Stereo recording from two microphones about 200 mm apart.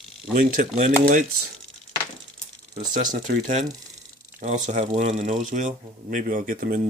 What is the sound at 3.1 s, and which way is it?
Speech, 40° right (ahead or behind).